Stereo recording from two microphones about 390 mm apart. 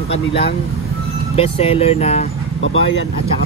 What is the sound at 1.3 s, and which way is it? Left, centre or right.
Speech, centre.